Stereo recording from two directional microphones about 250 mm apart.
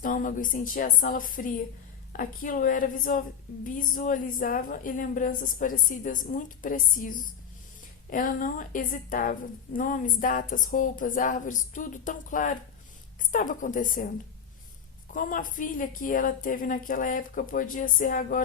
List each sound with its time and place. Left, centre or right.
0.0 s a woman's voice: left
15.1 s a woman's voice: left